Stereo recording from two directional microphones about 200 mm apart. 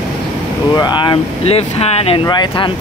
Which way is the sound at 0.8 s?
25° left (ahead or behind).